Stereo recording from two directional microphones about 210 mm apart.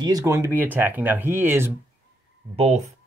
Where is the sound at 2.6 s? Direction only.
30° right (ahead or behind).